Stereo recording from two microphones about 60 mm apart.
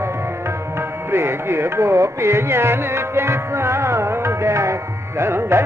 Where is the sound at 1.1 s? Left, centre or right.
Right.